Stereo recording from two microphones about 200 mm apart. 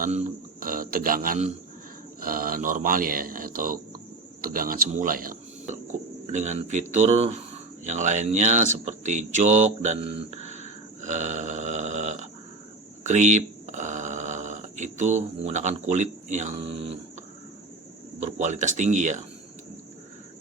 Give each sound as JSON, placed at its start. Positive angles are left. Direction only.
{"t": 0.0, "sound": "a man's voice", "side_deg": -35}
{"t": 13.1, "sound": "a sound", "side_deg": -35}
{"t": 18.2, "sound": "speech", "side_deg": -35}